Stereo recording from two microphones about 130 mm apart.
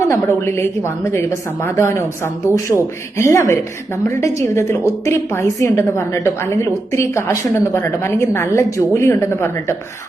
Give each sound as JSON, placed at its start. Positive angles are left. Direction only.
{"t": 0.0, "sound": "a woman's voice", "side_deg": 20}